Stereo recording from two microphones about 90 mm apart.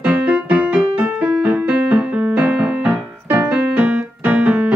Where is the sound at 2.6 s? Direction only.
15° right (ahead or behind).